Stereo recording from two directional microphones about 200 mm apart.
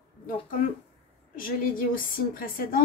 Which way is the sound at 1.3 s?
45° left (ahead or behind).